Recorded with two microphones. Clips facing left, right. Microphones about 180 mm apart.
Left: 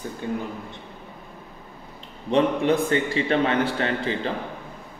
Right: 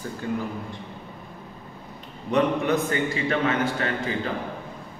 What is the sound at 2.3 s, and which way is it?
A man's voice, 30° left (ahead or behind).